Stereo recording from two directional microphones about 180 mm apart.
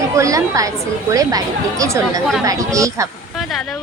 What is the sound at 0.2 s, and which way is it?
Speech, 20° right (ahead or behind).